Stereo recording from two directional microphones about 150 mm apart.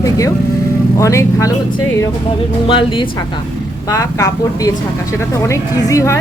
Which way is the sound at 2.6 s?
35° left (ahead or behind).